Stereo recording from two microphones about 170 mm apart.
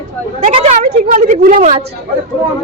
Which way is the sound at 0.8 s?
55° right (ahead or behind).